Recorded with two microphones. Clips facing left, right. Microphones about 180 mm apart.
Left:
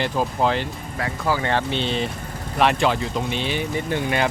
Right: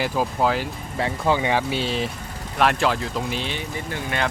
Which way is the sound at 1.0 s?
25° right (ahead or behind).